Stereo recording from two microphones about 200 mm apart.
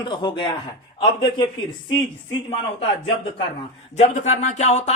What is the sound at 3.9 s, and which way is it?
A woman's voice, 35° left (ahead or behind).